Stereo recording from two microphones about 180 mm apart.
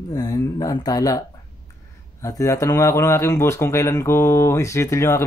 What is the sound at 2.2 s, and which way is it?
A man's voice, 15° left (ahead or behind).